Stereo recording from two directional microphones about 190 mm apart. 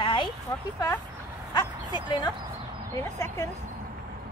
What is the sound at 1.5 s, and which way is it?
Bow-wow, 20° left (ahead or behind).